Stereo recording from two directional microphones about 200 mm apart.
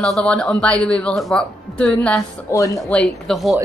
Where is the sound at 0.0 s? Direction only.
5° left (ahead or behind).